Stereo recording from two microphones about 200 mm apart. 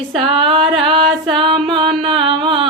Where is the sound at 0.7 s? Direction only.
25° right (ahead or behind).